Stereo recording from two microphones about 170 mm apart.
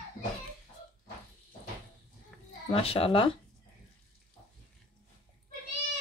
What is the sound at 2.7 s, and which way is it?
Speech, 35° left (ahead or behind).